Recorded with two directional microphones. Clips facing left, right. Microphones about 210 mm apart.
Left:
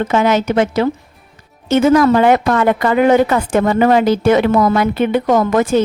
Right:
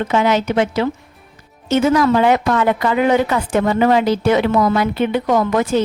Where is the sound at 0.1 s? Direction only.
45° left (ahead or behind).